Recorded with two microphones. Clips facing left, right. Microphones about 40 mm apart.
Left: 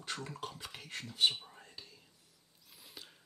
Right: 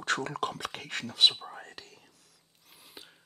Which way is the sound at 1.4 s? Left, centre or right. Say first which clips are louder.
Right 9 dB; right.